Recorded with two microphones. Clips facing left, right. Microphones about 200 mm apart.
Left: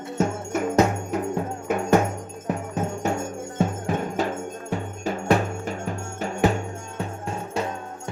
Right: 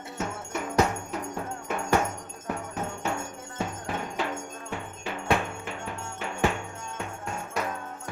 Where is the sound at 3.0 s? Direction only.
40° left (ahead or behind).